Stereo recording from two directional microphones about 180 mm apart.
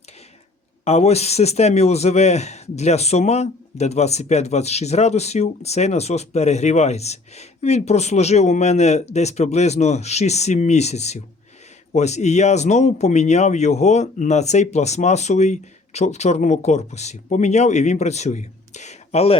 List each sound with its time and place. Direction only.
0.9 s speech: 35° left (ahead or behind)